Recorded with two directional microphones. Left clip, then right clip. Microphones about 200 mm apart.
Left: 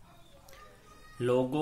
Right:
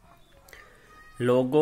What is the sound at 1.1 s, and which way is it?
Speech, 40° right (ahead or behind).